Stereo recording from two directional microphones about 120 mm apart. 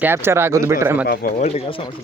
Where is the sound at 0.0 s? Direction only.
20° right (ahead or behind).